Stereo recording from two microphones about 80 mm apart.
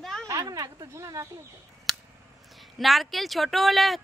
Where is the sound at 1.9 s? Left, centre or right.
Centre.